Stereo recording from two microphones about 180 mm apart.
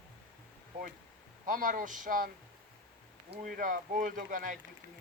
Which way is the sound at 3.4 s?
50° right (ahead or behind).